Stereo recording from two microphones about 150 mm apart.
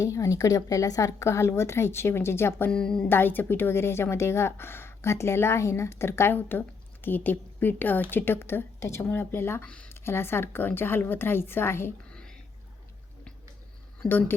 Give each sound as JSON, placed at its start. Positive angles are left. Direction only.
{"t": 0.0, "sound": "speech", "side_deg": 20}
{"t": 14.1, "sound": "speech", "side_deg": 15}